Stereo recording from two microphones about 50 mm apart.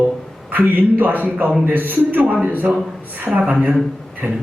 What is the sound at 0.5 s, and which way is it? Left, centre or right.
A man's voice, right.